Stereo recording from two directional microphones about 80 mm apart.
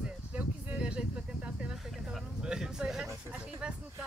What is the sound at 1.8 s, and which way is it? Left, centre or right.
Speech, centre.